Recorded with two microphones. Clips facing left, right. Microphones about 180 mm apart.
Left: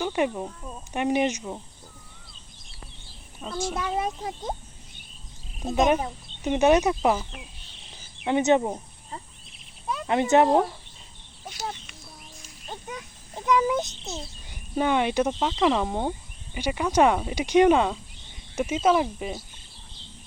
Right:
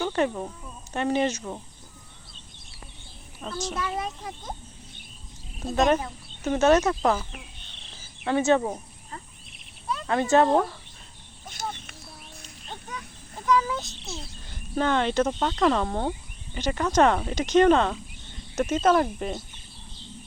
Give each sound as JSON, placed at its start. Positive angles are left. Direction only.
{"t": 0.0, "sound": "a sound", "side_deg": 10}
{"t": 0.9, "sound": "speech", "side_deg": 15}
{"t": 3.4, "sound": "speech", "side_deg": 10}
{"t": 5.5, "sound": "speech", "side_deg": 15}
{"t": 13.3, "sound": "speech", "side_deg": 20}